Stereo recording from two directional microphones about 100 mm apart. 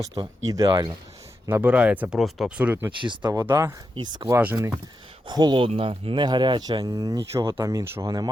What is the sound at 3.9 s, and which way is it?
Speech, 50° right (ahead or behind).